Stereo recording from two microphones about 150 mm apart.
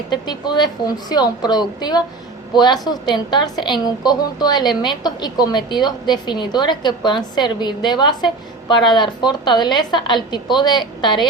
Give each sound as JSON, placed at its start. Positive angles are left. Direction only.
{"t": 0.1, "sound": "a woman's voice", "side_deg": 30}